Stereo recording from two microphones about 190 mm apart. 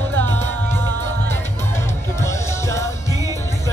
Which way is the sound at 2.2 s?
15° left (ahead or behind).